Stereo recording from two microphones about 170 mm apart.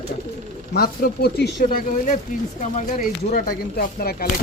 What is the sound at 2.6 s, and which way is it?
Speech, 45° left (ahead or behind).